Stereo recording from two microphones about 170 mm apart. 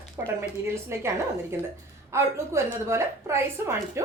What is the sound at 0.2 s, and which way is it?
A woman's voice, 15° right (ahead or behind).